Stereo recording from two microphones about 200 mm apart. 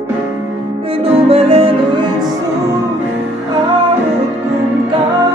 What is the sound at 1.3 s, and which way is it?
Music, 30° right (ahead or behind).